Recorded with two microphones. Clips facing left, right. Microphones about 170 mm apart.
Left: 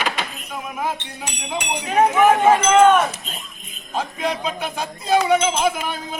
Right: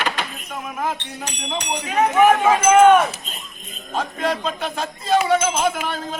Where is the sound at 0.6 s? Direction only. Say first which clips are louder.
Even; 5° left (ahead or behind).